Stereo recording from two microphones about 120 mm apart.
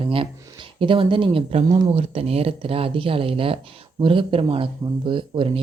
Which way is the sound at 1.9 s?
55° right (ahead or behind).